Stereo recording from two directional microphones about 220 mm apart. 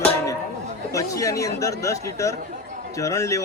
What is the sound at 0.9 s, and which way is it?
Speech, 15° left (ahead or behind).